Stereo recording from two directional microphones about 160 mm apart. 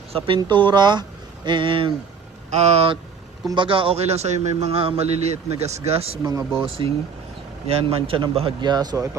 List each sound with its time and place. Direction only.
0.1 s a man's voice: 30° right (ahead or behind)
6.2 s speech: 20° right (ahead or behind)
6.6 s a man's voice: 35° right (ahead or behind)